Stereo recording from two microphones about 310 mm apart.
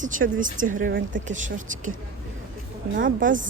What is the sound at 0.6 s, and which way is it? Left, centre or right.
Speech, right.